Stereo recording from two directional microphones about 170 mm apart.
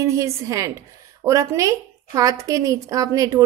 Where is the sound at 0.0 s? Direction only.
20° right (ahead or behind).